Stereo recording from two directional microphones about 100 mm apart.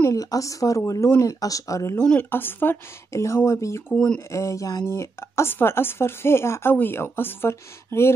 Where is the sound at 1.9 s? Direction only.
15° left (ahead or behind).